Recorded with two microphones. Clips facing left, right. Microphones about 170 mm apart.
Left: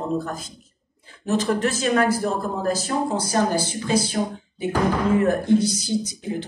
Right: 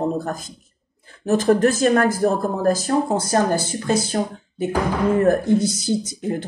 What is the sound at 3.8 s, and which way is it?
Speech, 45° right (ahead or behind).